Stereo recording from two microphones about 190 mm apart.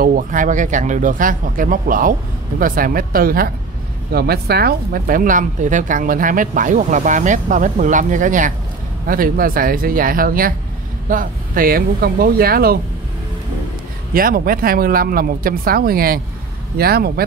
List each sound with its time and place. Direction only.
0.0 s speech: 45° right (ahead or behind)
14.1 s speech: 50° right (ahead or behind)